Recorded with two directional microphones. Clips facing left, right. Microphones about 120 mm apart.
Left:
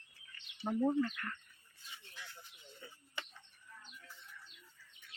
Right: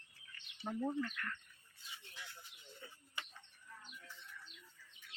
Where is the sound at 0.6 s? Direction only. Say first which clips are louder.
Left 6 dB; 25° left (ahead or behind).